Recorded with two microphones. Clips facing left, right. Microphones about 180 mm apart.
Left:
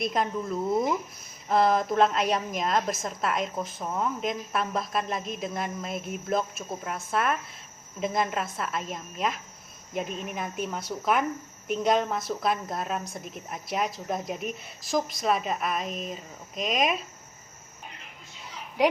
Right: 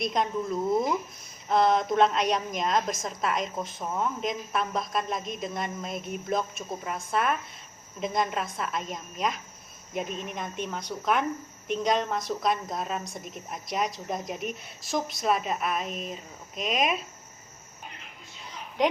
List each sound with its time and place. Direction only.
0.0 s a woman's voice: centre (ahead or behind)